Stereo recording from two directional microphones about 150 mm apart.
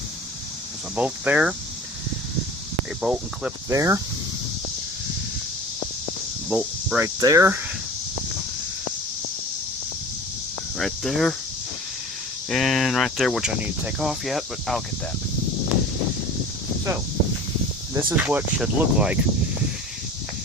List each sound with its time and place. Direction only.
0.9 s speech: 10° right (ahead or behind)
3.0 s speech: 5° right (ahead or behind)
3.7 s speech: 20° right (ahead or behind)
6.5 s speech: 10° right (ahead or behind)
7.2 s speech: 20° right (ahead or behind)
10.8 s speech: centre (ahead or behind)
12.5 s speech: centre (ahead or behind)
18.2 s speech: 10° right (ahead or behind)